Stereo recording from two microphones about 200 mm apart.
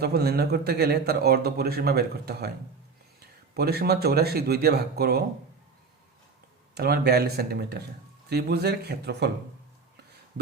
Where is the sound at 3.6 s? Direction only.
50° right (ahead or behind).